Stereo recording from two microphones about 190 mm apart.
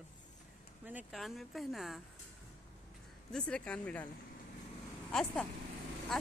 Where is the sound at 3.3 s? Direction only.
5° left (ahead or behind).